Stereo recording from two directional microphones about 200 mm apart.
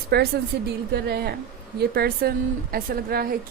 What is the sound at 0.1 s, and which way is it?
Speech, 50° right (ahead or behind).